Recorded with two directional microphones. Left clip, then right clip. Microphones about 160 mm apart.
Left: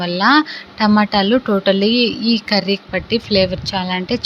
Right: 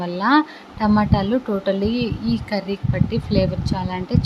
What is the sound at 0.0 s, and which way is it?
A woman's voice, 10° left (ahead or behind).